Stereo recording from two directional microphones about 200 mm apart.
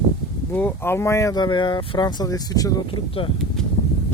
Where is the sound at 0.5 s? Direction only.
10° left (ahead or behind).